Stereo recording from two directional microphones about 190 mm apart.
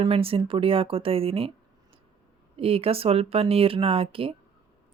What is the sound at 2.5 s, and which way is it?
Speech, 30° right (ahead or behind).